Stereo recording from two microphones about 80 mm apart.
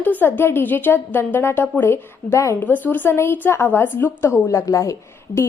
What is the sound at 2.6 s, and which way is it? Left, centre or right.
A woman's voice, left.